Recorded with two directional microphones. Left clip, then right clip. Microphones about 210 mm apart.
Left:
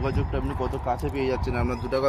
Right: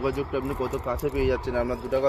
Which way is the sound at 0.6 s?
40° left (ahead or behind).